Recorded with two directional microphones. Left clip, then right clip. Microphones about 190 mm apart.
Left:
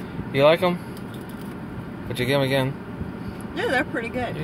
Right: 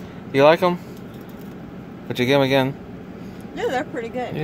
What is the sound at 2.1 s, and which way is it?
Speech, 50° right (ahead or behind).